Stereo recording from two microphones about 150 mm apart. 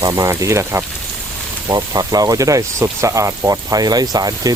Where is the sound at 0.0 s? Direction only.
20° right (ahead or behind).